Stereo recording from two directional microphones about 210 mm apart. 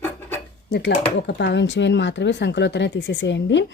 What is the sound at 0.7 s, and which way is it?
Speech, 55° left (ahead or behind).